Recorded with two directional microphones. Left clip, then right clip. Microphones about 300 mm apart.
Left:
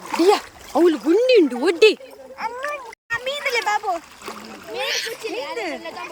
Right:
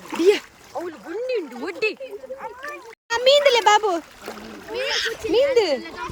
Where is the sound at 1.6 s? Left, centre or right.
Left.